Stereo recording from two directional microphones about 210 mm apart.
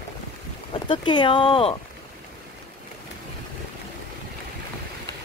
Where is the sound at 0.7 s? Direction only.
20° left (ahead or behind).